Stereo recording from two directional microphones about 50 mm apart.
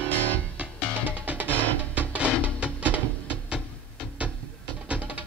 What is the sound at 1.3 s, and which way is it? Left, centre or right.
Music, right.